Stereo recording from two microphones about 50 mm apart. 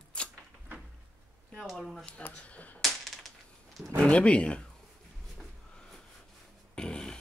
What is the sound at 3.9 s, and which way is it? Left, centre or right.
Speech, left.